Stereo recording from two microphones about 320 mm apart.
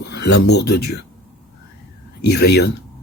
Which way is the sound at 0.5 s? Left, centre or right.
Left.